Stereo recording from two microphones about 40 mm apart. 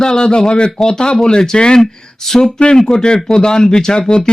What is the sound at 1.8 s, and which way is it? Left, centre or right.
A man's voice, centre.